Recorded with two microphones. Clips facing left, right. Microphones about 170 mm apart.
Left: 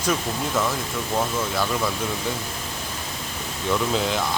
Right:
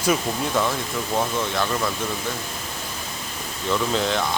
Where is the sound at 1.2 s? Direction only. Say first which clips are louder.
Even; 5° left (ahead or behind).